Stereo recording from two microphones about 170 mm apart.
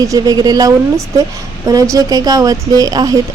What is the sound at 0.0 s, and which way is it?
Speech, 20° right (ahead or behind).